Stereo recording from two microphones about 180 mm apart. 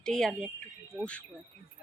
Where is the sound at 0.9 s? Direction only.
15° right (ahead or behind).